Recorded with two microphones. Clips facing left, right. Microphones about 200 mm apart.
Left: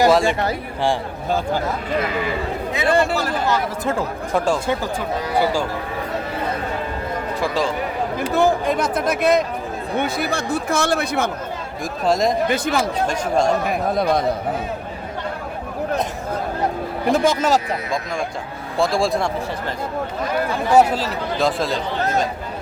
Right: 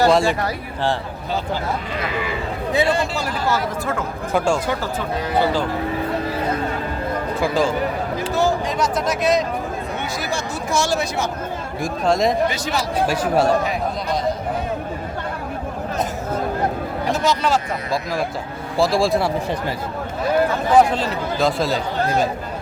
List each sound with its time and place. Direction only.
0.1 s speech: centre (ahead or behind)
2.9 s speech: 55° left (ahead or behind)
4.3 s speech: centre (ahead or behind)
7.4 s speech: centre (ahead or behind)
8.3 s speech: 55° left (ahead or behind)
11.8 s speech: centre (ahead or behind)
12.5 s speech: 55° left (ahead or behind)
13.1 s speech: 5° right (ahead or behind)
13.7 s speech: 55° left (ahead or behind)
17.1 s speech: 45° left (ahead or behind)
18.8 s speech: centre (ahead or behind)
20.7 s speech: 5° left (ahead or behind)